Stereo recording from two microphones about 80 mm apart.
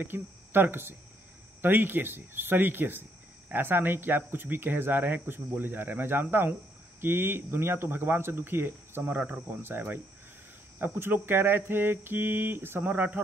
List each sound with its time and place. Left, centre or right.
0.0 s speech: right